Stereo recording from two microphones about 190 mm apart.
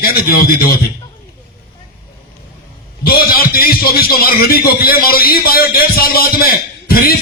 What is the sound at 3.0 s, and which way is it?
A man's voice, 55° left (ahead or behind).